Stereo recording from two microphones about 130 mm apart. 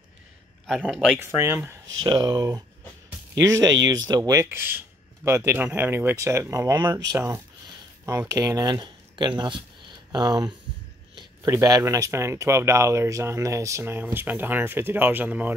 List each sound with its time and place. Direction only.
0.7 s speech: centre (ahead or behind)
1.2 s speech: 20° right (ahead or behind)
2.0 s speech: 30° right (ahead or behind); by 15.5 s 10° right (ahead or behind)